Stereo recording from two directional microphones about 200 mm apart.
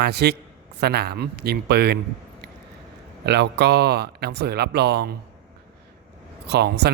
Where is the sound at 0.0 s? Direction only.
55° right (ahead or behind).